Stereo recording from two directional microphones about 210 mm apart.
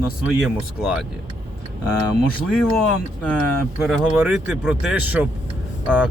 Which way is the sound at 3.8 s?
5° right (ahead or behind).